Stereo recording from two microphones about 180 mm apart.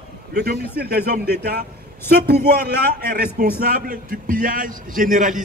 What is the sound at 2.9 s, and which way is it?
A man's voice, 55° right (ahead or behind).